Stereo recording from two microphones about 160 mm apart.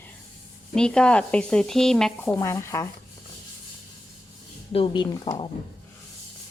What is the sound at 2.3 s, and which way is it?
Speech, 20° left (ahead or behind).